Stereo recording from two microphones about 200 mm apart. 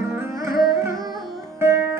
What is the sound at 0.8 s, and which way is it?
Carnatic music, 15° right (ahead or behind).